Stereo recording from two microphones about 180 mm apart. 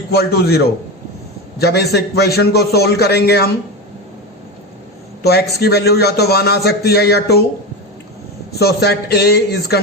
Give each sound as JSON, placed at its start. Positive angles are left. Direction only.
{"t": 0.1, "sound": "a man's voice", "side_deg": 60}
{"t": 5.2, "sound": "a man's voice", "side_deg": 60}
{"t": 8.5, "sound": "a man's voice", "side_deg": 65}